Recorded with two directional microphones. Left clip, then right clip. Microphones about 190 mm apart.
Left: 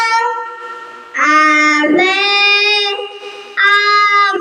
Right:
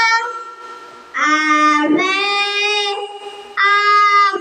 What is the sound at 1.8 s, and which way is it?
Child singing, 25° left (ahead or behind).